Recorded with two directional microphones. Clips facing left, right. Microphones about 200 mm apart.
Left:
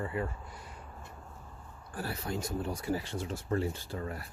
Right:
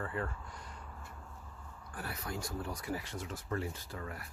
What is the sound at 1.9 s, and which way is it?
Speech, 30° left (ahead or behind).